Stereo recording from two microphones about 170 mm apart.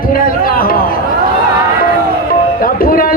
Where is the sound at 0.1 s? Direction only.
60° left (ahead or behind).